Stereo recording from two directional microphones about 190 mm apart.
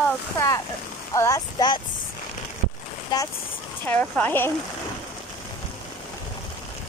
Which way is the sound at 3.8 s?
10° left (ahead or behind).